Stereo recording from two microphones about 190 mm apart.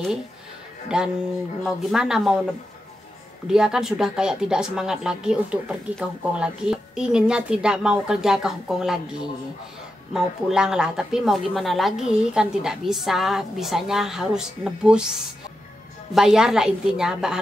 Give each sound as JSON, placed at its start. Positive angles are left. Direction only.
{"t": 0.8, "sound": "speech", "side_deg": -5}
{"t": 3.4, "sound": "speech", "side_deg": -5}
{"t": 10.1, "sound": "speech", "side_deg": -5}
{"t": 16.2, "sound": "speech", "side_deg": -5}